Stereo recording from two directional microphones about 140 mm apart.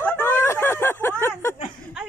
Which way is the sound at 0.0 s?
15° left (ahead or behind).